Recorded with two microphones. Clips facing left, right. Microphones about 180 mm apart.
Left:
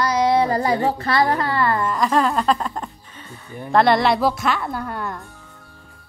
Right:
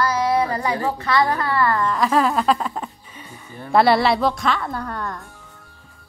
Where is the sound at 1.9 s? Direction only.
5° right (ahead or behind).